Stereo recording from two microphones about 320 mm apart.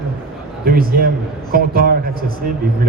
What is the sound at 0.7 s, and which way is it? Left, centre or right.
A man's voice, right.